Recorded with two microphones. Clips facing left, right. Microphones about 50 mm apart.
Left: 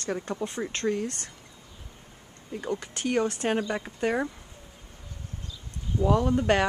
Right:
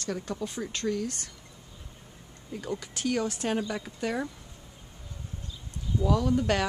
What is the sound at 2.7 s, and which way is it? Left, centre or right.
Speech, left.